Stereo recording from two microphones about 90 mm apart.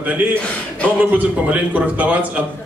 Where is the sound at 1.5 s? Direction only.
15° right (ahead or behind).